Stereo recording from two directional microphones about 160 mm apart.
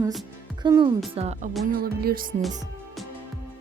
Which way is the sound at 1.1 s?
40° right (ahead or behind).